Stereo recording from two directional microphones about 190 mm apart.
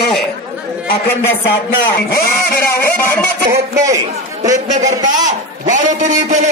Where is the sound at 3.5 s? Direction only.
15° right (ahead or behind).